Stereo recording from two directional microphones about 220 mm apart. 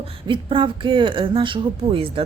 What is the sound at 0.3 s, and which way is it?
Speech, 20° right (ahead or behind).